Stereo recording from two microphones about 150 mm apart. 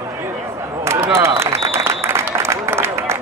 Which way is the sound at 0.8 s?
15° right (ahead or behind).